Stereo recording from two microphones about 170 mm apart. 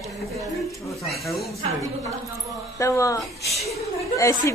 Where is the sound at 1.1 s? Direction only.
Centre (ahead or behind).